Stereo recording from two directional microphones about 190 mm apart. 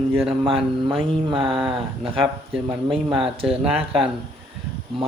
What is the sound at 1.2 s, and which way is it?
Speech, 25° right (ahead or behind).